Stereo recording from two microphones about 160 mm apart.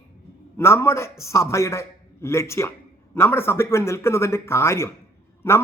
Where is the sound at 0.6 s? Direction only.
15° left (ahead or behind).